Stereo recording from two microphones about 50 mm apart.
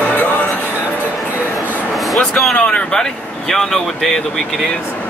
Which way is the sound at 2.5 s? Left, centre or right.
Left.